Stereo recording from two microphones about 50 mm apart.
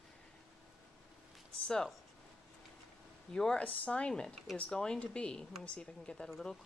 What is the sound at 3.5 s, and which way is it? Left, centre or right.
Speech, left.